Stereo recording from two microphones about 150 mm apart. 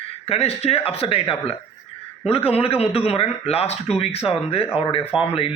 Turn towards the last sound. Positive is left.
turn(degrees=40)  # may be behind; listen again after turning